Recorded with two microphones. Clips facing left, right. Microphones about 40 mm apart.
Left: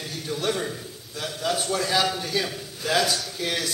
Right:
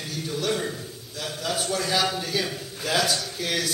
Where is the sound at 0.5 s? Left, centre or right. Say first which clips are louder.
Right 1 dB; centre.